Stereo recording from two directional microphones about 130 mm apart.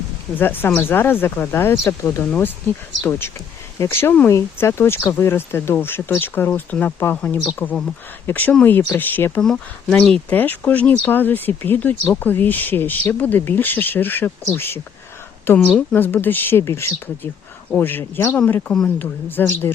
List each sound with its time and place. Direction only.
0.3 s speech: 15° left (ahead or behind)
2.2 s speech: 10° left (ahead or behind)
9.4 s speech: 5° left (ahead or behind)